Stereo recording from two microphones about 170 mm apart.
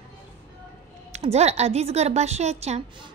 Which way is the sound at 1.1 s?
40° right (ahead or behind).